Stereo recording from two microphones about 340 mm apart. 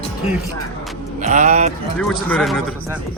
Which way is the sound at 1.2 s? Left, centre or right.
Right.